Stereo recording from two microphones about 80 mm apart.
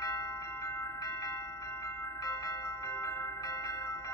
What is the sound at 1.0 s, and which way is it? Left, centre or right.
Music, left.